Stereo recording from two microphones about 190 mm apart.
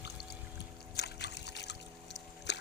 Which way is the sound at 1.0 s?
60° left (ahead or behind).